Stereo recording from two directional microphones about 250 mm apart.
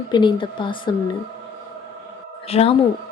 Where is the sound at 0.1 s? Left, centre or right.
Centre.